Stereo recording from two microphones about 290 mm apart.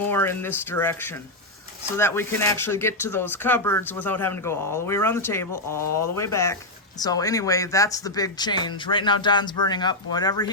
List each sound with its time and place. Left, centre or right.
0.1 s speech: centre